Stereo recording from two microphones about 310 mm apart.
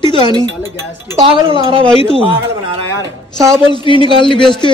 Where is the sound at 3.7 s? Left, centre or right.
Centre.